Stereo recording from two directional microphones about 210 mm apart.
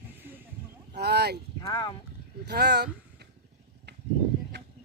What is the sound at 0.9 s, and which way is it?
Speech, 50° right (ahead or behind).